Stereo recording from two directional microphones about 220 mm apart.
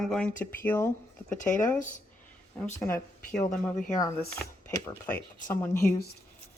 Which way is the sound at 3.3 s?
40° left (ahead or behind).